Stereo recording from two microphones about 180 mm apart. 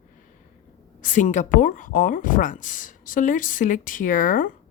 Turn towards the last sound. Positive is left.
turn(degrees=50)  # may be behind; listen again after turning